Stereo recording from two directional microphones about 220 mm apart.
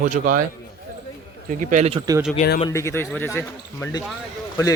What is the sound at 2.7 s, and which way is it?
Speech, 10° left (ahead or behind).